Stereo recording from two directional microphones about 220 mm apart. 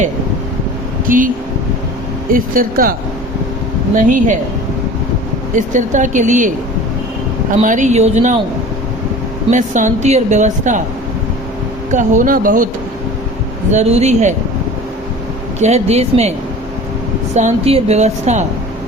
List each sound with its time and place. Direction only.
1.0 s speech: 40° right (ahead or behind)
2.3 s a woman's voice: 40° right (ahead or behind)
3.9 s a woman's voice: 35° right (ahead or behind)
5.5 s a woman's voice: 35° right (ahead or behind)
7.6 s a woman's voice: 35° right (ahead or behind)
9.5 s a woman's voice: 35° right (ahead or behind)
11.9 s a woman's voice: 35° right (ahead or behind)
13.7 s a woman's voice: 30° right (ahead or behind)
15.6 s speech: 30° right (ahead or behind)
17.3 s a woman's voice: 30° right (ahead or behind)